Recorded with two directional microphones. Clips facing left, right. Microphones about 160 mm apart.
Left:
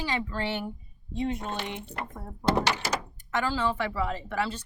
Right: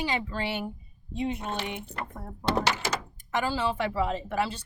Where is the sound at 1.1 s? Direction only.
15° right (ahead or behind).